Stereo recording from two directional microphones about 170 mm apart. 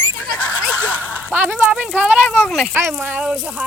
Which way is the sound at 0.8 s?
10° right (ahead or behind).